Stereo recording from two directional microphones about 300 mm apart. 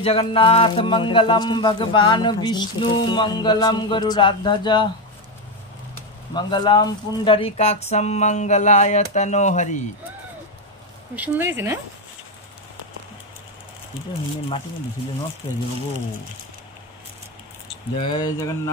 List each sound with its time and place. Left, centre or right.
0.0 s speech: centre
6.3 s speech: centre
11.1 s speech: centre
17.9 s speech: centre